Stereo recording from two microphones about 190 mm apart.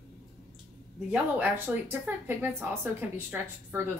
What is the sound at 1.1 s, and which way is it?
A woman's voice, 10° right (ahead or behind).